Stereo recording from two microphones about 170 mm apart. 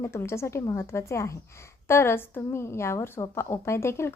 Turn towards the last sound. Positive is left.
turn(degrees=15)  # may be behind; listen again after turning